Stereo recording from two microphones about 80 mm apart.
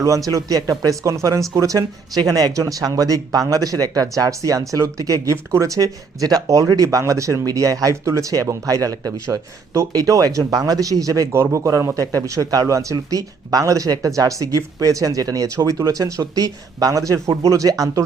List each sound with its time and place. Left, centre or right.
0.3 s speech: right
11.3 s speech: right